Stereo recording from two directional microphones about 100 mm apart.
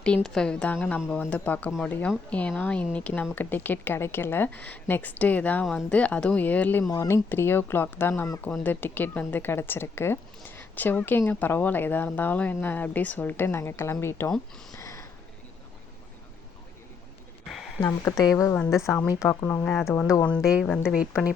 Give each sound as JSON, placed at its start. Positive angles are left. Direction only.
{"t": 0.0, "sound": "speech", "side_deg": 10}
{"t": 6.9, "sound": "speech", "side_deg": 35}
{"t": 7.3, "sound": "speech", "side_deg": 20}
{"t": 14.7, "sound": "a sound", "side_deg": 35}
{"t": 17.8, "sound": "speech", "side_deg": 35}
{"t": 18.4, "sound": "speech", "side_deg": 20}
{"t": 18.7, "sound": "speech", "side_deg": 30}
{"t": 20.4, "sound": "a woman's voice", "side_deg": -5}